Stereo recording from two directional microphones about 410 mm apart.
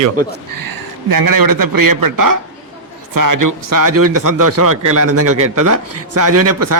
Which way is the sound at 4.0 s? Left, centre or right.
Right.